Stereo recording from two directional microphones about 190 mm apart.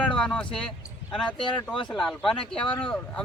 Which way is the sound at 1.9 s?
5° left (ahead or behind).